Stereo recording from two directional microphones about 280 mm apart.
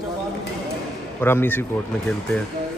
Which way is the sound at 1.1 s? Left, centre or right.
Centre.